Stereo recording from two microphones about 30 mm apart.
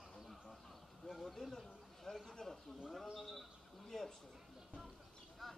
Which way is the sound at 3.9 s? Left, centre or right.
Centre.